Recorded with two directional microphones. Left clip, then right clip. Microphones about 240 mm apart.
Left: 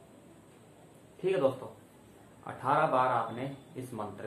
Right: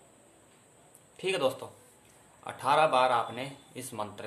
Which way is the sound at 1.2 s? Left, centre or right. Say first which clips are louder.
Even; right.